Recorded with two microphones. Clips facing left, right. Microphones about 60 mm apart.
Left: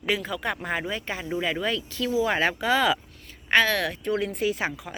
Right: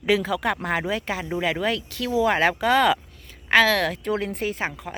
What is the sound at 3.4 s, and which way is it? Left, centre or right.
Speech, right.